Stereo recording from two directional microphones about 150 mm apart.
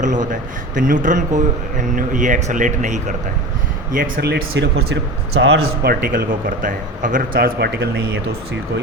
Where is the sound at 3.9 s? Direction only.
65° right (ahead or behind); by 4.4 s 85° right.